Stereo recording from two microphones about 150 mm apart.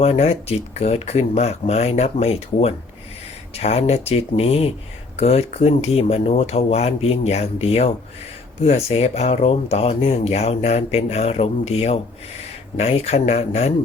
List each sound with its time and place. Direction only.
0.0 s speech: 45° left (ahead or behind)